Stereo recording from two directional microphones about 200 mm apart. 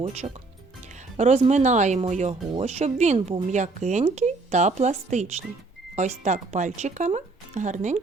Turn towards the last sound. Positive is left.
turn(degrees=-35)  # may be behind; listen again after turning